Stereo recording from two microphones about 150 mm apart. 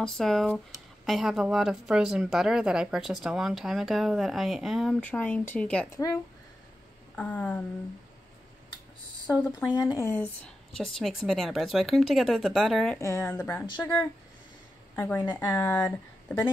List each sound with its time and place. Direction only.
0.0 s a woman's voice: centre (ahead or behind)
5.0 s speech: 10° left (ahead or behind)
7.2 s speech: 10° left (ahead or behind)
9.3 s speech: 20° left (ahead or behind)
10.0 s a woman's voice: 10° left (ahead or behind)
13.0 s speech: 15° left (ahead or behind)